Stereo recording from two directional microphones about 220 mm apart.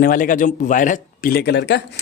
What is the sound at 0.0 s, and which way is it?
Speech, 40° left (ahead or behind).